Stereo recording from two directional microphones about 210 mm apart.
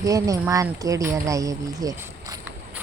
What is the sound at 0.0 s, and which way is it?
Speech, 15° right (ahead or behind).